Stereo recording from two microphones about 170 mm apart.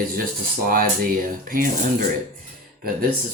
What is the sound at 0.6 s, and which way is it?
Speech, 55° right (ahead or behind).